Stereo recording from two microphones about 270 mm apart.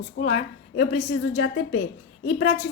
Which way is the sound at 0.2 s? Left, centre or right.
Left.